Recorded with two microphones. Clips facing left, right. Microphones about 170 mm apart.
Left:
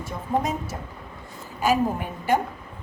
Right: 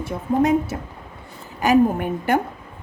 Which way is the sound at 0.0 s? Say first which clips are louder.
Right 6 dB; 60° right (ahead or behind).